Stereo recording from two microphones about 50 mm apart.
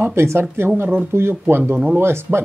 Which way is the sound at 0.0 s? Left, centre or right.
Right.